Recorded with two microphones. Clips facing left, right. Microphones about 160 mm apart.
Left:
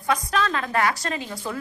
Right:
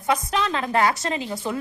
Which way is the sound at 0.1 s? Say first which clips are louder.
Right 1 dB; 20° right (ahead or behind).